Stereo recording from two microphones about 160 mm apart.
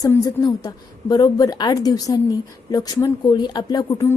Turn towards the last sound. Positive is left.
turn(degrees=25)  # may be behind; listen again after turning